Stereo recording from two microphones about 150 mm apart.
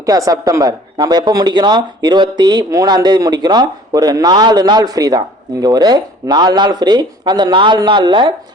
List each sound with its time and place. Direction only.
0.0 s speech: 25° right (ahead or behind)